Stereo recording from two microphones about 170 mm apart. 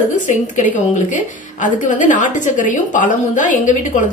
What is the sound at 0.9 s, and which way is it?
A woman's voice, 50° left (ahead or behind).